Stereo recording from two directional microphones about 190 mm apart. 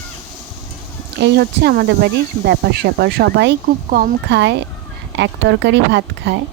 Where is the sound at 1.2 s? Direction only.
60° right (ahead or behind).